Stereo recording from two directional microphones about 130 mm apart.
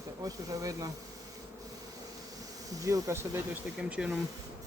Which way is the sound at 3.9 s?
5° right (ahead or behind).